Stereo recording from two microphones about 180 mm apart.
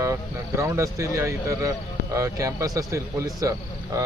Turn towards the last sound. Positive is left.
turn(degrees=-20)  # may be behind; listen again after turning